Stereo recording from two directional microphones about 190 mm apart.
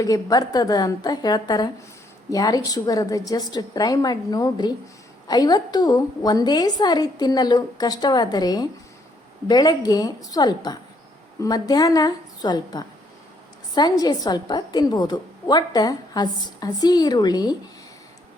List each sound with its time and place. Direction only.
0.0 s a woman's voice: 20° left (ahead or behind)
14.0 s a woman's voice: 20° left (ahead or behind)